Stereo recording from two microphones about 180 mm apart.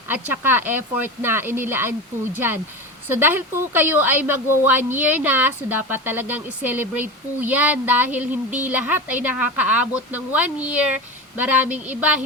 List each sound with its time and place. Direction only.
0.1 s a woman's voice: 10° right (ahead or behind)
3.1 s a woman's voice: 10° right (ahead or behind)